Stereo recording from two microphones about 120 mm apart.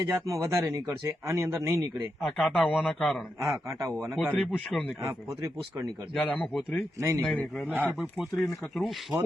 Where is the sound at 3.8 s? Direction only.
25° right (ahead or behind).